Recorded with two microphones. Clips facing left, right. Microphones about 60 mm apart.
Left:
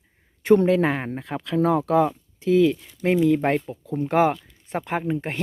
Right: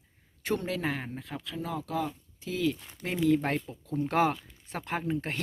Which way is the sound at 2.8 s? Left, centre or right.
Right.